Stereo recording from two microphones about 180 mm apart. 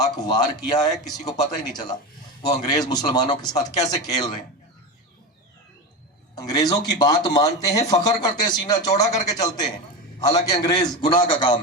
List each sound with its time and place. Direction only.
0.0 s speech: 20° left (ahead or behind)
6.3 s speech: 20° left (ahead or behind)